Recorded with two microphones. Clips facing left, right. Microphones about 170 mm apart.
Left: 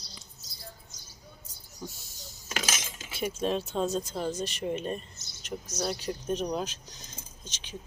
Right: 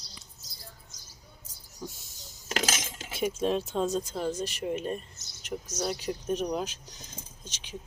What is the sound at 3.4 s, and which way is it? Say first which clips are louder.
Speech: even; 10° right (ahead or behind).